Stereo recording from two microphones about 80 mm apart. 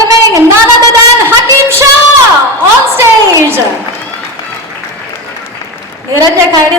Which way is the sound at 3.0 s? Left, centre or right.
Right.